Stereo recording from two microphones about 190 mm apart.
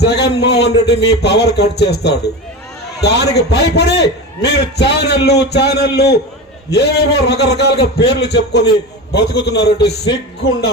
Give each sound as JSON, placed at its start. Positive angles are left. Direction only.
{"t": 0.0, "sound": "a man's voice", "side_deg": 60}